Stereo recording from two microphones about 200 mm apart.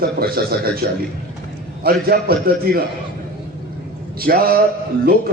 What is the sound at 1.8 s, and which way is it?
Speech, 50° right (ahead or behind).